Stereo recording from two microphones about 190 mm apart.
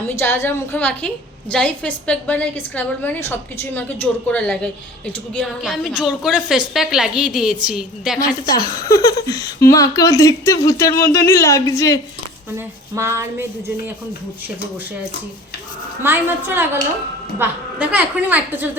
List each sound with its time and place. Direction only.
0.2 s a woman's voice: 10° left (ahead or behind)
8.4 s speech: 20° left (ahead or behind)
12.5 s a woman's voice: 15° right (ahead or behind)
16.0 s a woman's voice: 10° right (ahead or behind)